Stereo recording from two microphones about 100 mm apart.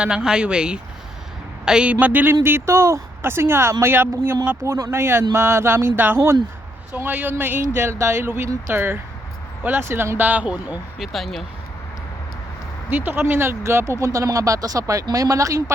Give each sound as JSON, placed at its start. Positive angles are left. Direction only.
{"t": 0.0, "sound": "speech", "side_deg": -5}
{"t": 11.0, "sound": "speech", "side_deg": 0}
{"t": 12.9, "sound": "speech", "side_deg": -15}